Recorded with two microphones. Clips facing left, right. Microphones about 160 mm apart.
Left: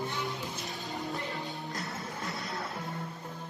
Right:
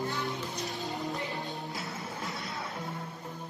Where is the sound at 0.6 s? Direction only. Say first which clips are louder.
Right 2 dB; centre (ahead or behind).